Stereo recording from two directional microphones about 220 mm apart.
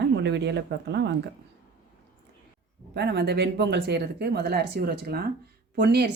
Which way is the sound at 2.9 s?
50° right (ahead or behind).